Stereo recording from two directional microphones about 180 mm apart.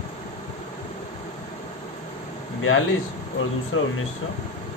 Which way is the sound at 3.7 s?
90° left.